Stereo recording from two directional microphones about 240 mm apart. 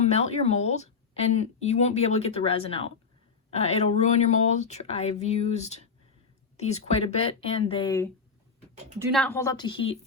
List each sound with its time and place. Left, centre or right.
0.0 s speech: left
7.1 s speech: left
9.1 s a woman's voice: centre